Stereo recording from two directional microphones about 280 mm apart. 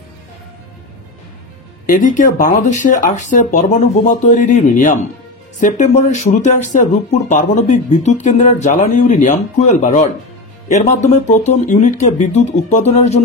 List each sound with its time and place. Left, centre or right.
1.9 s speech: left